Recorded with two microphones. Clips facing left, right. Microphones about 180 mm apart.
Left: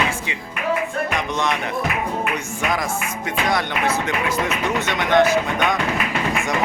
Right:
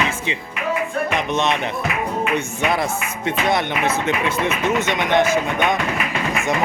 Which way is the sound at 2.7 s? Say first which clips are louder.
Right 2 dB; 25° right (ahead or behind).